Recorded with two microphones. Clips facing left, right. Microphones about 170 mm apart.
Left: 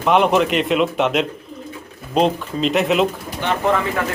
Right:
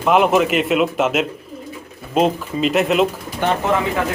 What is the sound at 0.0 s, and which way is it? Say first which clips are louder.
A man's voice: right 1 dB; 5° right (ahead or behind).